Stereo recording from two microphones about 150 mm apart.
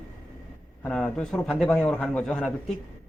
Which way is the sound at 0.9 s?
5° left (ahead or behind).